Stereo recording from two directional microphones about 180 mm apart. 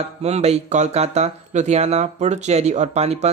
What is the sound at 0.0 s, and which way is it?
Speech, 35° right (ahead or behind).